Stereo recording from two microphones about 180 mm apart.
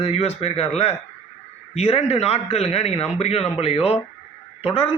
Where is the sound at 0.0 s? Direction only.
35° left (ahead or behind).